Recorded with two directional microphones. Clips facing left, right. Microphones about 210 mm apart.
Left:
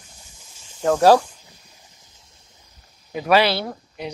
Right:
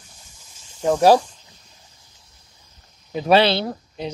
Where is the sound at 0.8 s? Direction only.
15° right (ahead or behind).